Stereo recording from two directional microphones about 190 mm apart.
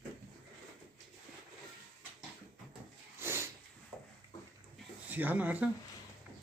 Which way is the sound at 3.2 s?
15° right (ahead or behind).